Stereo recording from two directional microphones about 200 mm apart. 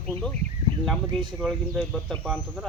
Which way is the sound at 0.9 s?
Centre (ahead or behind).